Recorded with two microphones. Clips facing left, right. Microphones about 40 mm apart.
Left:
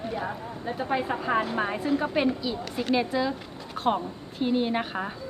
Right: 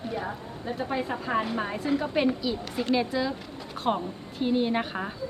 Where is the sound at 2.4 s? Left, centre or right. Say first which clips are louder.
Even; centre.